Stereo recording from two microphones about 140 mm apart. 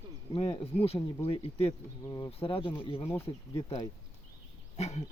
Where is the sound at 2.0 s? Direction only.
25° left (ahead or behind).